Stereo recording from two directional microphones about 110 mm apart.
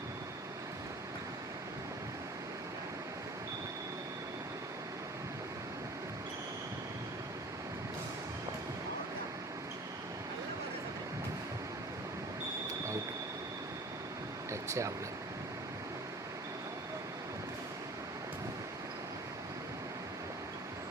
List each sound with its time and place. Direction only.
14.5 s vehicle: 25° right (ahead or behind)